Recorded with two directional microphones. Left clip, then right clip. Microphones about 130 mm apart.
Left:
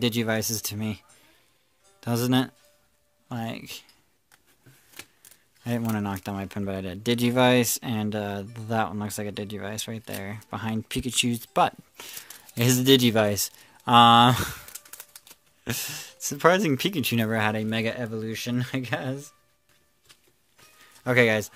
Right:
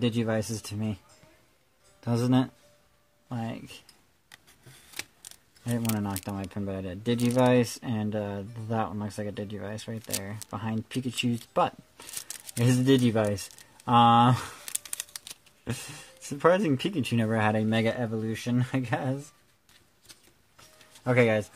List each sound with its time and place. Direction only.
0.0 s speech: 20° left (ahead or behind)
5.6 s speech: 15° left (ahead or behind)
17.4 s speech: centre (ahead or behind)
21.0 s speech: 15° left (ahead or behind)